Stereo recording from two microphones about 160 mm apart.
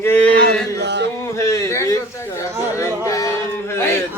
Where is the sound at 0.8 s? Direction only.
90° right.